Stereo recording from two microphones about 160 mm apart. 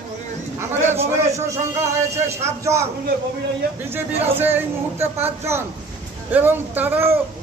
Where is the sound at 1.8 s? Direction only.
15° right (ahead or behind).